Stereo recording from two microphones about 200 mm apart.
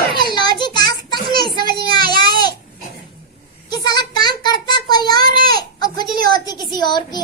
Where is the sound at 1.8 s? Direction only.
20° left (ahead or behind).